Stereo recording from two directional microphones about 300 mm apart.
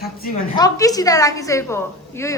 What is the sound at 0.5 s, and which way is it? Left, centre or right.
A woman's voice, centre.